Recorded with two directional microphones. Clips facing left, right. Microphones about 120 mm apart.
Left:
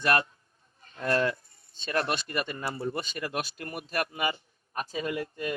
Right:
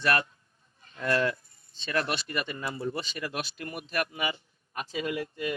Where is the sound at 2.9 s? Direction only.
45° left (ahead or behind).